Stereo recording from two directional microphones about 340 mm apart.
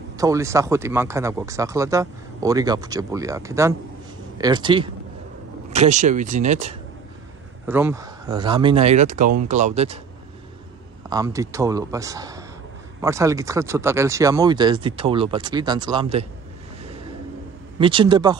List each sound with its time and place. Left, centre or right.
0.2 s speech: centre
7.6 s speech: centre
11.1 s speech: centre
17.7 s speech: centre